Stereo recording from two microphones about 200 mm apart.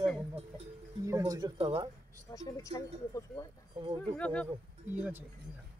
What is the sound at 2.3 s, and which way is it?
Speech, 15° left (ahead or behind).